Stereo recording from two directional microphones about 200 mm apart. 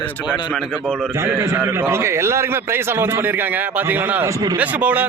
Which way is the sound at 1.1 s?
10° right (ahead or behind).